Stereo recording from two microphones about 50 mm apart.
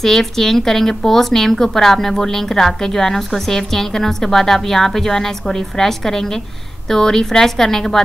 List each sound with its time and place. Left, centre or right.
0.0 s speech: centre